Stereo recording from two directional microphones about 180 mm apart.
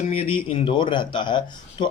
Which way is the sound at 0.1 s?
30° left (ahead or behind).